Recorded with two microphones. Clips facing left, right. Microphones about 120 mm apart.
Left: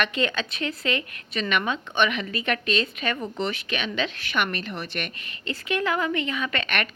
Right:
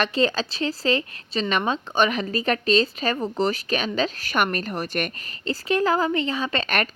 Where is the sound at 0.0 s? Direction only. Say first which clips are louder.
Right 4 dB; 35° right (ahead or behind).